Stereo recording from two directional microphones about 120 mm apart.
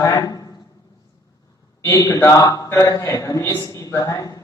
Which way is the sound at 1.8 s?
25° left (ahead or behind).